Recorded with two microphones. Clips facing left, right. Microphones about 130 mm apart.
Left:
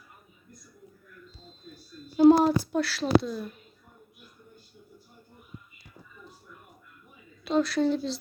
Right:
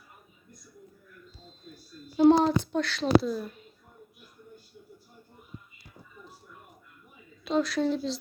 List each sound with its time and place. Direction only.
2.1 s speech: 5° left (ahead or behind)
7.4 s speech: centre (ahead or behind)